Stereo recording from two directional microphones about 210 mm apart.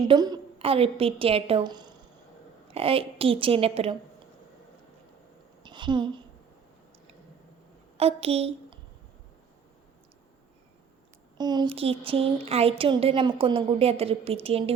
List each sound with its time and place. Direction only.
0.0 s a woman's voice: 20° right (ahead or behind)
5.6 s a woman's voice: 20° right (ahead or behind)
7.9 s a woman's voice: 30° right (ahead or behind)
11.3 s a woman's voice: 20° right (ahead or behind)